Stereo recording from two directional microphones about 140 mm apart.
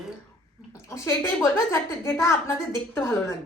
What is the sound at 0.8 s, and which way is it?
A woman's voice, 20° left (ahead or behind).